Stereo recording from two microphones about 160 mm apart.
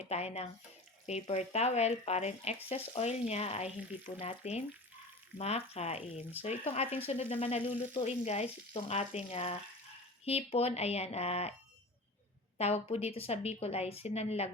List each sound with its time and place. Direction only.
0.0 s a woman's voice: 40° left (ahead or behind)
12.5 s a woman's voice: 40° left (ahead or behind)